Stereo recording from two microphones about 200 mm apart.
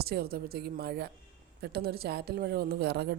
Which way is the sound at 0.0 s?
50° right (ahead or behind).